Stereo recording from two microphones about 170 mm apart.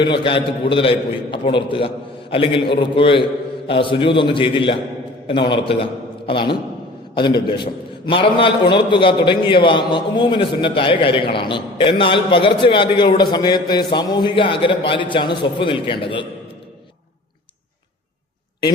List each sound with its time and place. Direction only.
0.0 s a man's voice: 30° left (ahead or behind)